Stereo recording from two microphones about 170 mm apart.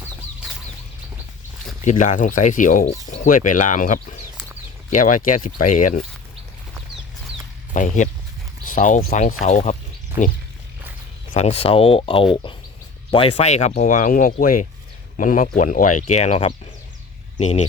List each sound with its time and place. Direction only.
1.8 s speech: 45° left (ahead or behind)
2.8 s speech: 40° left (ahead or behind)
7.7 s speech: 45° left (ahead or behind)
11.3 s speech: 35° left (ahead or behind)